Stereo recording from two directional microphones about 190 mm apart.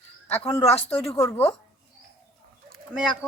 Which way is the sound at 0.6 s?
35° left (ahead or behind).